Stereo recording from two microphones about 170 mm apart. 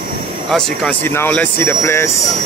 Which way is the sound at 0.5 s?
5° left (ahead or behind).